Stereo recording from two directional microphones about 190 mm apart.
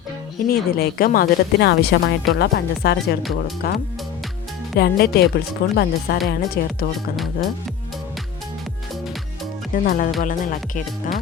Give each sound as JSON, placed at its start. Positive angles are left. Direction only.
{"t": 0.4, "sound": "speech", "side_deg": 50}
{"t": 9.7, "sound": "speech", "side_deg": 45}